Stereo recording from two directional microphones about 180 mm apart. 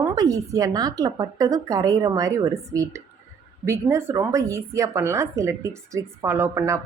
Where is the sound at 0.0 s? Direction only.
20° right (ahead or behind).